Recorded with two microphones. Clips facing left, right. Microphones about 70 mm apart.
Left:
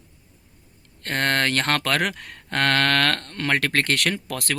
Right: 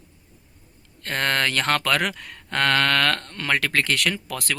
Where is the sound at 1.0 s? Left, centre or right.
Left.